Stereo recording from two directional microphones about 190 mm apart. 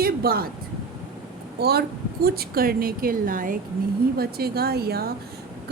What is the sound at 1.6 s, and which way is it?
Speech, 55° right (ahead or behind).